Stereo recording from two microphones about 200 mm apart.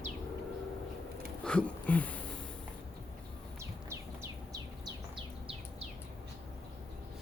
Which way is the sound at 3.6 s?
15° right (ahead or behind).